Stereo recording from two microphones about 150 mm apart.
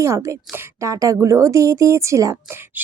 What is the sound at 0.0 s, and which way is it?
A woman's voice, 20° right (ahead or behind).